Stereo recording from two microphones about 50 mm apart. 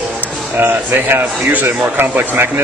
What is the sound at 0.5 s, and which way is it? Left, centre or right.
A man's voice, right.